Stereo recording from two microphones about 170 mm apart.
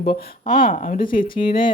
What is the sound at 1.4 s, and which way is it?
Speech, 30° left (ahead or behind).